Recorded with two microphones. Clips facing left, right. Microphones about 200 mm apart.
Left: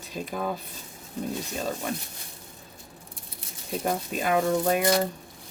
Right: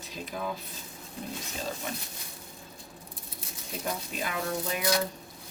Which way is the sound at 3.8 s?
50° left (ahead or behind).